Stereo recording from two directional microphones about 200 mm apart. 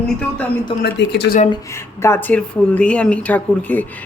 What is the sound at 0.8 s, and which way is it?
Speech, 55° left (ahead or behind).